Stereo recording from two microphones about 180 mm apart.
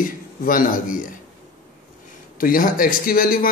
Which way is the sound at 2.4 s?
50° left (ahead or behind).